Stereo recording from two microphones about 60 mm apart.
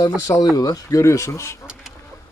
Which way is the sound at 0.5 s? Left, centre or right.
Left.